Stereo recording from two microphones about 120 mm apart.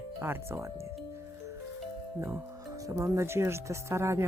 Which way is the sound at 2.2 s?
20° right (ahead or behind).